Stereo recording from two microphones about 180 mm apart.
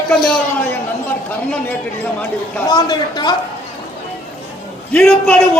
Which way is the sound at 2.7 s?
20° left (ahead or behind).